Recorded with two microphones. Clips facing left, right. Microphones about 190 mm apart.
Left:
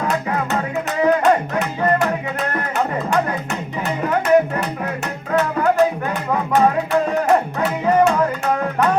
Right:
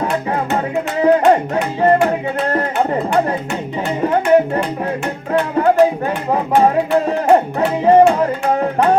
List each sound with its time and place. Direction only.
1.0 s music: 30° right (ahead or behind)